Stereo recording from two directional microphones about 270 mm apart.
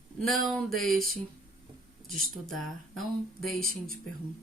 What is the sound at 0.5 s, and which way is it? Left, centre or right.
Speech, centre.